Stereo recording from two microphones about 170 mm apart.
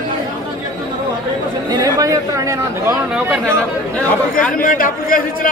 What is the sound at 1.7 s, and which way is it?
Speech, 20° right (ahead or behind).